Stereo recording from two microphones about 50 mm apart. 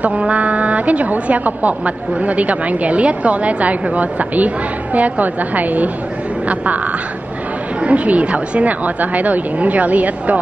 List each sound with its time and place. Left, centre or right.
0.0 s a woman's voice: right
7.8 s speech: right